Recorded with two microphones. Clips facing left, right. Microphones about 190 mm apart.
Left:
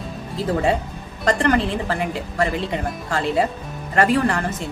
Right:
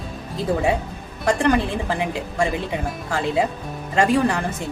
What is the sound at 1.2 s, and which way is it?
A woman's voice, 10° right (ahead or behind).